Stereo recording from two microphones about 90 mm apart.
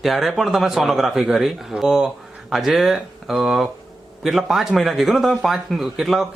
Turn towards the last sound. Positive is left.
turn(degrees=0)  # may be behind; listen again after turning